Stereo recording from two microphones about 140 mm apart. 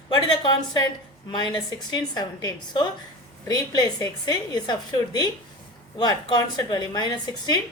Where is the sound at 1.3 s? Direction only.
30° left (ahead or behind).